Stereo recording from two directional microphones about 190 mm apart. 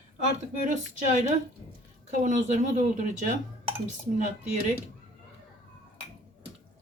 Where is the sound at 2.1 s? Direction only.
40° right (ahead or behind).